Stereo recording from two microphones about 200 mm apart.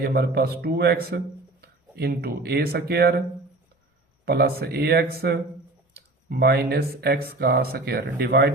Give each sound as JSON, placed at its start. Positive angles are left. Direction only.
{"t": 0.0, "sound": "speech", "side_deg": -50}
{"t": 4.3, "sound": "speech", "side_deg": -50}